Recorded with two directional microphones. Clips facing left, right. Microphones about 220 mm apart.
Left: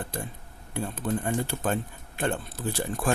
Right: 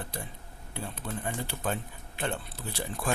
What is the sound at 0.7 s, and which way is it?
Speech, 50° left (ahead or behind).